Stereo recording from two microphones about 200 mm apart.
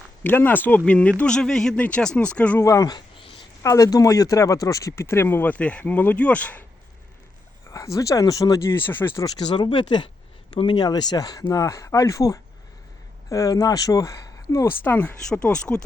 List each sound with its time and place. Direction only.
0.2 s speech: 10° left (ahead or behind)
7.7 s speech: 15° left (ahead or behind)